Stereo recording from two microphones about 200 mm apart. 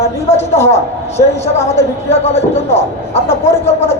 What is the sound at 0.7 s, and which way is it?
A woman's voice, 30° left (ahead or behind).